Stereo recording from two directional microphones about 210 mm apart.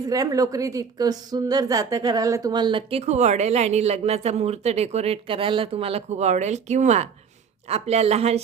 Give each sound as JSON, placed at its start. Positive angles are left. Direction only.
{"t": 0.1, "sound": "a woman's voice", "side_deg": -15}